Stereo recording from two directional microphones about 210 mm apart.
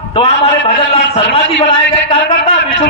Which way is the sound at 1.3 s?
25° left (ahead or behind).